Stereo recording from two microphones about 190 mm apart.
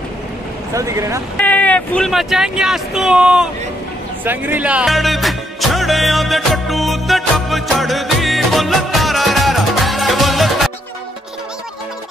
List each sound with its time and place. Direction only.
0.7 s speech: 15° right (ahead or behind)
1.4 s speech: 10° left (ahead or behind)
4.2 s music: 10° right (ahead or behind)